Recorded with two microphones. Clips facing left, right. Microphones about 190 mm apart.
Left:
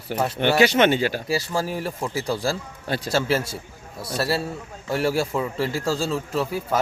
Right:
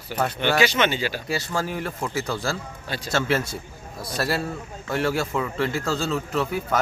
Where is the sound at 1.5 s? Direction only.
35° left (ahead or behind).